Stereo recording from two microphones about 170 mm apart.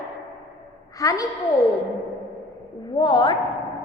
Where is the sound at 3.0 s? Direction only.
25° left (ahead or behind).